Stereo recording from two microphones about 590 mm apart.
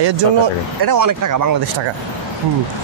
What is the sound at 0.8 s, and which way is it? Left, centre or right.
Speech, right.